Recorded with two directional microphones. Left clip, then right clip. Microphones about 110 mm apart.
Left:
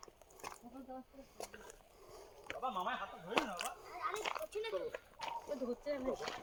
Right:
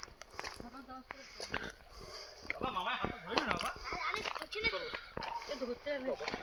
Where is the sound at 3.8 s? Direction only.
65° left (ahead or behind).